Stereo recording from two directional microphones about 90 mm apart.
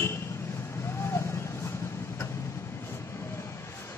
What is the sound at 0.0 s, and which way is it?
Vehicle, 30° left (ahead or behind).